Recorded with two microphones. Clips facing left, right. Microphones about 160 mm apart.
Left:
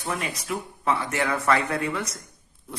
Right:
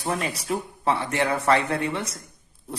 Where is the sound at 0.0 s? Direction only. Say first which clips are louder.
Right 3 dB; 35° right (ahead or behind).